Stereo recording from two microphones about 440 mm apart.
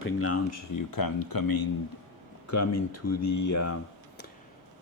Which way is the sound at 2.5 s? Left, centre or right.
Left.